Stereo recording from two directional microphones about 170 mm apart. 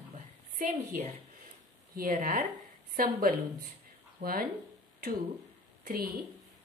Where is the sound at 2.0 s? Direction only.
55° right (ahead or behind).